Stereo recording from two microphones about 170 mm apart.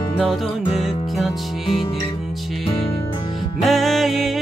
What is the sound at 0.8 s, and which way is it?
Music, centre (ahead or behind).